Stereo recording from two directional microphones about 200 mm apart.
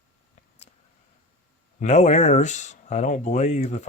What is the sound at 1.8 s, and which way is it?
Speech, 35° left (ahead or behind).